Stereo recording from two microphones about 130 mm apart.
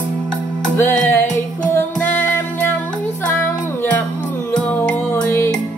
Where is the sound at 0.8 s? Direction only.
15° left (ahead or behind).